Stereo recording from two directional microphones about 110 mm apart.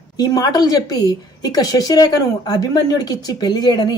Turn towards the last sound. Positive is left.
turn(degrees=40)  # may be behind; listen again after turning